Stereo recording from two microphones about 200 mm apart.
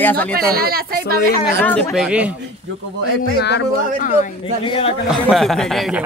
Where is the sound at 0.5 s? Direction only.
50° right (ahead or behind).